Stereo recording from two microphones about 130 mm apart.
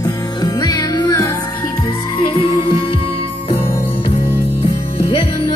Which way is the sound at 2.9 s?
45° left (ahead or behind).